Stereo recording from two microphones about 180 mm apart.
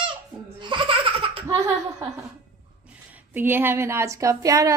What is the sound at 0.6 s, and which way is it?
Baby laughter, 25° right (ahead or behind).